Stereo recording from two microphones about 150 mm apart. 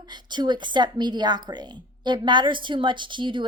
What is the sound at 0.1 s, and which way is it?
A woman's voice, 30° right (ahead or behind).